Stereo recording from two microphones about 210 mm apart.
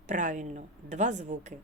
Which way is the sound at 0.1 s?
35° right (ahead or behind).